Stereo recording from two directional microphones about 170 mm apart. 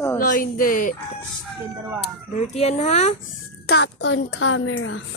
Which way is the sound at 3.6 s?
75° left (ahead or behind).